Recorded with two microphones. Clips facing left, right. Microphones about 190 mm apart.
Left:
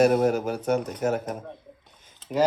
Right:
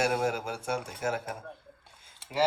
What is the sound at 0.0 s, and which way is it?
Speech, 10° right (ahead or behind).